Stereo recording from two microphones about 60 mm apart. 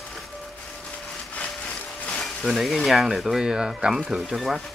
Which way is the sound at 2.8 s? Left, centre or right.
Centre.